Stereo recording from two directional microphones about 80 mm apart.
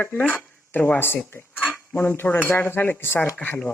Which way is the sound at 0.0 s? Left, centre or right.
Centre.